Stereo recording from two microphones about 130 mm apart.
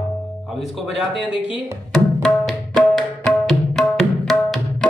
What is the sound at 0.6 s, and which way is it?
Speech, 5° right (ahead or behind).